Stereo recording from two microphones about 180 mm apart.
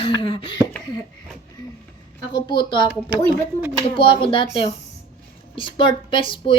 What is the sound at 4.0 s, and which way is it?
Speech, 30° left (ahead or behind).